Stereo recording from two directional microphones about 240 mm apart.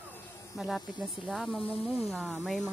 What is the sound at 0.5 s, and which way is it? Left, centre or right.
Speech, centre.